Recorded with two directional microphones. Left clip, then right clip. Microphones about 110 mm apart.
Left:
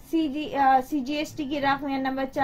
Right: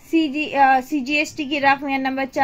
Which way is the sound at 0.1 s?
30° right (ahead or behind).